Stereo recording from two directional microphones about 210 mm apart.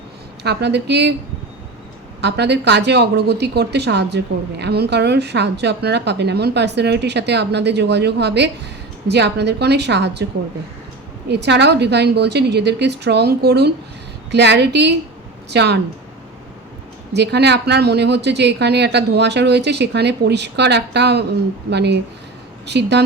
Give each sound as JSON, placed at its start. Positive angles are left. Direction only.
{"t": 0.4, "sound": "speech", "side_deg": -55}
{"t": 2.2, "sound": "speech", "side_deg": -55}
{"t": 11.3, "sound": "a woman's voice", "side_deg": -55}
{"t": 17.2, "sound": "speech", "side_deg": -55}